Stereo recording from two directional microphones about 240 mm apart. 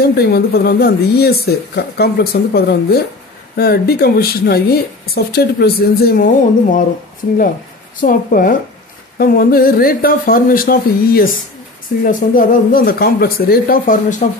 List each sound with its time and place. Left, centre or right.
0.0 s speech: left
8.0 s speech: left